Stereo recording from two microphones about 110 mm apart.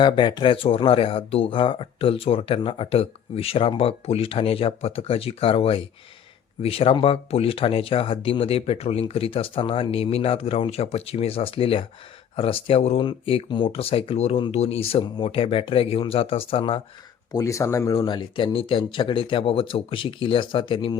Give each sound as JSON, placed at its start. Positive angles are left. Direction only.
{"t": 0.0, "sound": "speech", "side_deg": 45}
{"t": 13.0, "sound": "speech", "side_deg": 50}
{"t": 17.3, "sound": "speech", "side_deg": 30}